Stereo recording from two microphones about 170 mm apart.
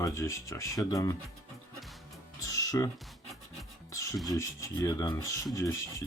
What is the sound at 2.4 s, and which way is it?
Music, 20° left (ahead or behind).